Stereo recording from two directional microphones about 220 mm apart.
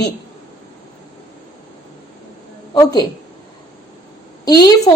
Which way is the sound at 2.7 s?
15° left (ahead or behind).